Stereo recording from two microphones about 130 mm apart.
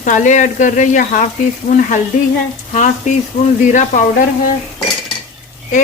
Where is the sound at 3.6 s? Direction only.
75° left (ahead or behind).